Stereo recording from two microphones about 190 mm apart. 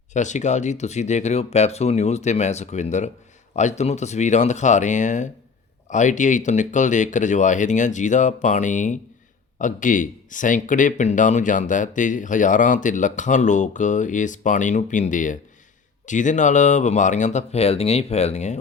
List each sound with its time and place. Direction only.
0.1 s speech: 40° left (ahead or behind)